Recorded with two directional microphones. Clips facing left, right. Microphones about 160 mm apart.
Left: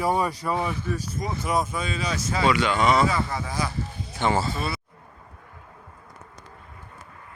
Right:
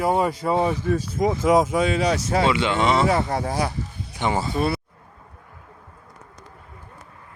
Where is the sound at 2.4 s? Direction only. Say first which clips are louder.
Left 2 dB; 25° right (ahead or behind).